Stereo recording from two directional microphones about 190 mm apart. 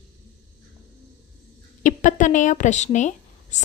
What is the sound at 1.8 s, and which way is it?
Speech, 40° left (ahead or behind).